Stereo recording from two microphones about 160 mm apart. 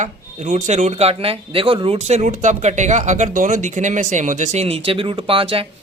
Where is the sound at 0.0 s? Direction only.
45° right (ahead or behind).